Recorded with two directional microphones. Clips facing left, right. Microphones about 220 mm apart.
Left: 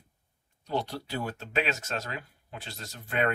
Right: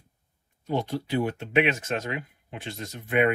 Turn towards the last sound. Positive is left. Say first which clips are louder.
# right 6 dB
turn(degrees=-15)  # may be behind; listen again after turning